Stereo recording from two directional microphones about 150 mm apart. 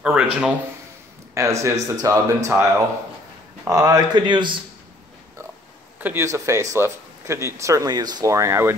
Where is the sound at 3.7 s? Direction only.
25° right (ahead or behind).